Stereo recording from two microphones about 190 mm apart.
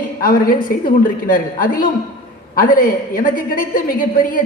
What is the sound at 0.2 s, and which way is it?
A woman's voice, 50° left (ahead or behind).